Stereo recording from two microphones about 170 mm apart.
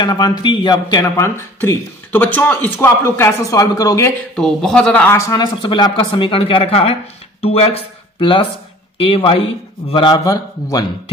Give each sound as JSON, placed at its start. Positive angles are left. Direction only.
{"t": 0.0, "sound": "a man's voice", "side_deg": 25}
{"t": 4.4, "sound": "a man's voice", "side_deg": 5}
{"t": 5.1, "sound": "a man's voice", "side_deg": 25}